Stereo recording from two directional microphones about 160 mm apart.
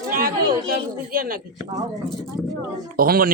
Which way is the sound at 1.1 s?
65° right (ahead or behind).